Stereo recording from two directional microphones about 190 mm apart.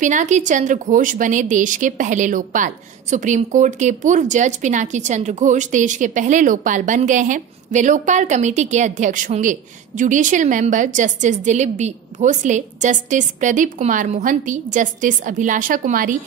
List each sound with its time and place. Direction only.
0.0 s a woman's voice: 40° right (ahead or behind)